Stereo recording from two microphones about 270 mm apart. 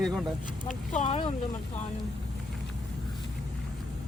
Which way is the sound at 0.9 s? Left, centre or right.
Left.